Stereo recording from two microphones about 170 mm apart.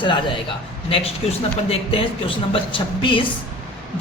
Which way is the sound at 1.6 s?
35° left (ahead or behind).